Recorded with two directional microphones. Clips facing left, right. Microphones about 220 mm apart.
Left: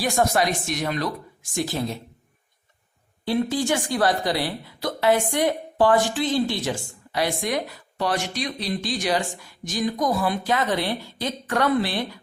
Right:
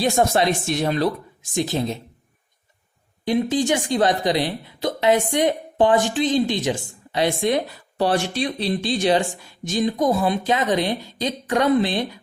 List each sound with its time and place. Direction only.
0.0 s speech: 25° right (ahead or behind)
3.2 s speech: 20° right (ahead or behind)